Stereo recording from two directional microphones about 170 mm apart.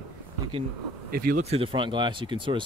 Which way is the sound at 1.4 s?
35° right (ahead or behind).